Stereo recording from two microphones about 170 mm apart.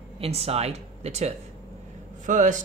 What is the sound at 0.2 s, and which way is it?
Speech, 35° right (ahead or behind).